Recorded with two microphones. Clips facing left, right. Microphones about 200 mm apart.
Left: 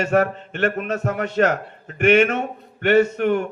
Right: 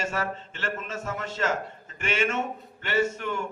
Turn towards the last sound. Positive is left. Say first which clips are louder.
# left 9 dB
turn(degrees=60)  # may be behind; listen again after turning